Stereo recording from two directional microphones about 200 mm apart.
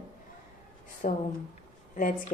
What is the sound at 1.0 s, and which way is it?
Speech, 40° left (ahead or behind).